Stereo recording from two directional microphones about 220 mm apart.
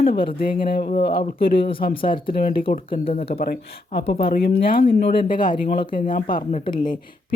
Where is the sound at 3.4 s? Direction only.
45° left (ahead or behind).